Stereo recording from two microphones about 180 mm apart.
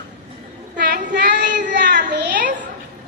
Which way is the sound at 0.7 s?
70° right (ahead or behind).